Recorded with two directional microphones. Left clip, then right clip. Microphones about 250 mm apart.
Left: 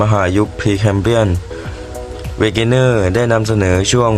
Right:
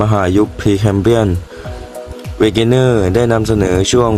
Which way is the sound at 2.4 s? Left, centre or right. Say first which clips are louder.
Right 2 dB; right.